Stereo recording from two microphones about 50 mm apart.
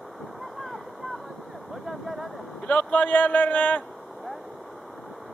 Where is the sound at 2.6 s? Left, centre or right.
Left.